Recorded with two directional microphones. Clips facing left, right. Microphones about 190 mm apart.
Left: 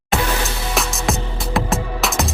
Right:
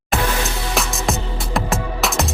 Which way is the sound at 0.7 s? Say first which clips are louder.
Left 1 dB; centre (ahead or behind).